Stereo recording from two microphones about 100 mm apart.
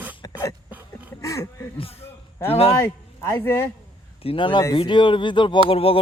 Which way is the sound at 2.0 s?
25° left (ahead or behind).